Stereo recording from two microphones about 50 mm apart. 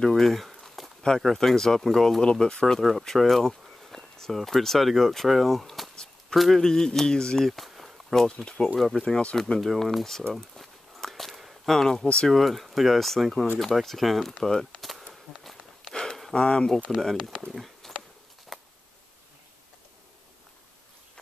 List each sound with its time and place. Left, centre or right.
0.1 s a sound: centre
1.2 s speech: centre
6.6 s speech: centre
9.0 s speech: centre
10.3 s walk: centre
12.3 s speech: centre
14.8 s a sound: centre
15.3 s walk: centre
16.3 s speech: centre
17.5 s a sound: centre